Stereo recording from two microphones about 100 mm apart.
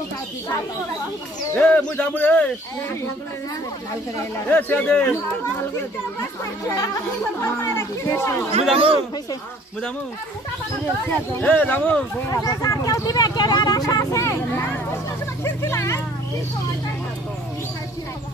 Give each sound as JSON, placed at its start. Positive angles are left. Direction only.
{"t": 1.5, "sound": "speech", "side_deg": 15}
{"t": 4.2, "sound": "speech", "side_deg": 20}
{"t": 7.4, "sound": "speech", "side_deg": 25}
{"t": 8.7, "sound": "speech", "side_deg": -60}
{"t": 11.3, "sound": "speech", "side_deg": 15}
{"t": 12.3, "sound": "speech", "side_deg": 40}